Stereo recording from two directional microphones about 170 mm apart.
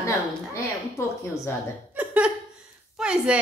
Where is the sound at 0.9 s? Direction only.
15° left (ahead or behind).